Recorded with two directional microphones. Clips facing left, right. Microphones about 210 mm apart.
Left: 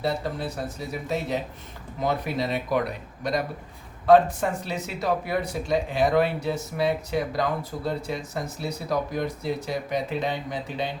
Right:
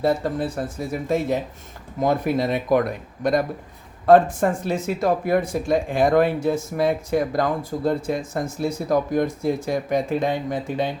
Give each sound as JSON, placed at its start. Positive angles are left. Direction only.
{"t": 0.0, "sound": "speech", "side_deg": -50}